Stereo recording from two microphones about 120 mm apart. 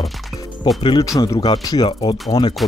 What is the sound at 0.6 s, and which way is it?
Speech, 40° left (ahead or behind).